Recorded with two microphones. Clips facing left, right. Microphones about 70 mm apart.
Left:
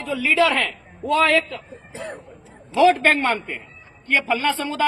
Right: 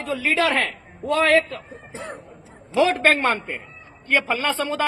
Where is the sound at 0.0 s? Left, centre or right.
Right.